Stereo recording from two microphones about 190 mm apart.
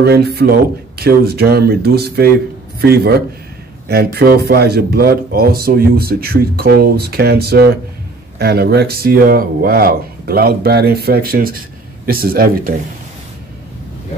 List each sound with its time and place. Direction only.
0.0 s speech: 55° right (ahead or behind)